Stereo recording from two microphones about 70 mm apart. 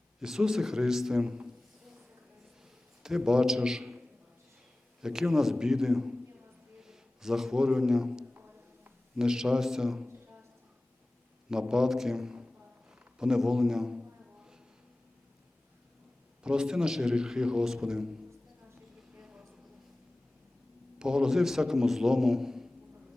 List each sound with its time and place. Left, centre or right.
0.2 s a man's voice: centre
3.0 s a man's voice: centre
8.3 s music: right
9.1 s a man's voice: centre
11.5 s a man's voice: centre
13.1 s a sound: centre
16.4 s a man's voice: centre
19.1 s a sound: centre
21.0 s a man's voice: centre